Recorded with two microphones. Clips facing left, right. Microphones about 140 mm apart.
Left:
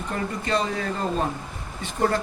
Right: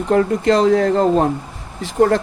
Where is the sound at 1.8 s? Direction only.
90° right.